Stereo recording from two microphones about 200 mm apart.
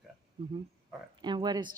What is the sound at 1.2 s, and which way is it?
Speech, 20° right (ahead or behind).